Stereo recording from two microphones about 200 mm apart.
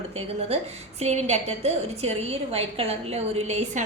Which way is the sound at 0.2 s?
30° right (ahead or behind).